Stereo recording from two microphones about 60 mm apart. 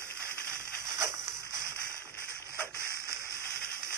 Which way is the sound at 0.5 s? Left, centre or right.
Right.